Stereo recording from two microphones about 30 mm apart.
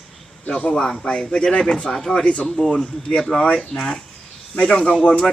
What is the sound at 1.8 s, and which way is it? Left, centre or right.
Speech, centre.